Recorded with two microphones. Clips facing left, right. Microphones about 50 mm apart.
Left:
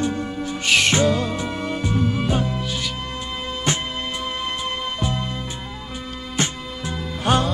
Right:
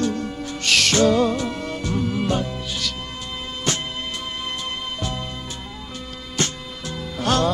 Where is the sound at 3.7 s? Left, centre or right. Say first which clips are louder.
Left 1 dB; left.